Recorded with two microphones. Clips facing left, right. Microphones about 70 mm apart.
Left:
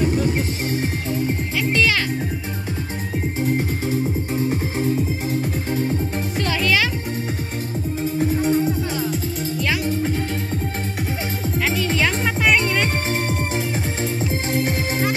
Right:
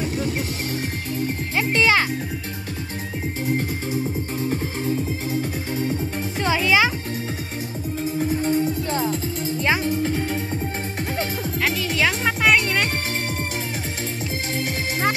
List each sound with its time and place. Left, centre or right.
1.6 s a child's voice: right
6.4 s music: centre
8.2 s music: centre
11.6 s music: centre